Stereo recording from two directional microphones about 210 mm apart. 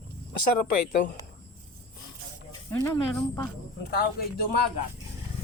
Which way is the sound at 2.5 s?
10° left (ahead or behind).